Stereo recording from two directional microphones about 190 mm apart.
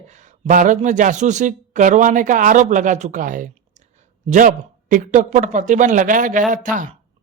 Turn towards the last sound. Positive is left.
turn(degrees=-45)  # may be behind; listen again after turning